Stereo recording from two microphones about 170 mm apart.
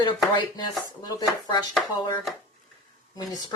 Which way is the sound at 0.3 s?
25° left (ahead or behind).